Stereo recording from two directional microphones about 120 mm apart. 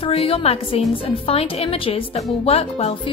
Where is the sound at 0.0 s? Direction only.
55° left (ahead or behind).